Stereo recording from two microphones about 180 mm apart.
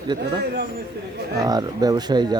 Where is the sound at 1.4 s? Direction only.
20° right (ahead or behind).